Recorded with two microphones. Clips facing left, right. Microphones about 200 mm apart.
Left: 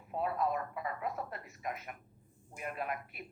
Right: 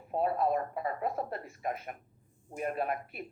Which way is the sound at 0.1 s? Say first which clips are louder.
Right 5 dB; 35° right (ahead or behind).